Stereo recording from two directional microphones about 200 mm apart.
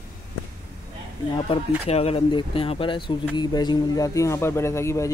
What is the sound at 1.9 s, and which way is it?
Speech, 30° left (ahead or behind).